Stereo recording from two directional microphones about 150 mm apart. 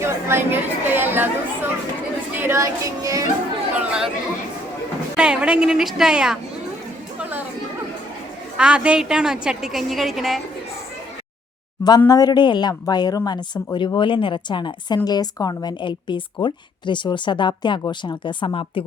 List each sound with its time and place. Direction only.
0.0 s chatter: 15° right (ahead or behind)
2.3 s a sound: 15° right (ahead or behind)
3.8 s chatter: 5° right (ahead or behind)
5.1 s a woman's voice: 5° right (ahead or behind)
8.5 s a woman's voice: 5° right (ahead or behind)
11.8 s speech: 25° left (ahead or behind)